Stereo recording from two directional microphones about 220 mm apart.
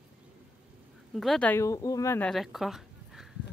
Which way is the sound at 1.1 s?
Centre (ahead or behind).